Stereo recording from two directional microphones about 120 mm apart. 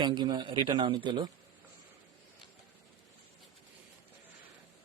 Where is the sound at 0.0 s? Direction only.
35° right (ahead or behind).